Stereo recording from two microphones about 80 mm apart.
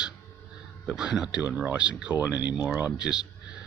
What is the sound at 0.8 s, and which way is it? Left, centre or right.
Speech, centre.